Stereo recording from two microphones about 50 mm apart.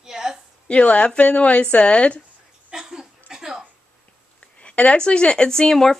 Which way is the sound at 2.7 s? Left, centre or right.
Centre.